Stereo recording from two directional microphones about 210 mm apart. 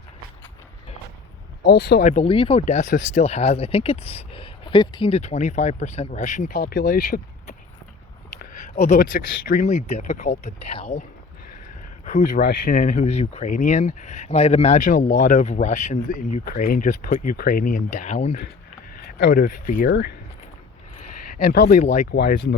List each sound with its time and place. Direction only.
1.6 s speech: 55° left (ahead or behind)
2.0 s speech: 35° left (ahead or behind)
8.4 s a sound: 35° left (ahead or behind)
9.5 s speech: 40° left (ahead or behind)
12.0 s speech: 35° left (ahead or behind)
21.2 s speech: 45° left (ahead or behind)
22.1 s speech: 50° left (ahead or behind)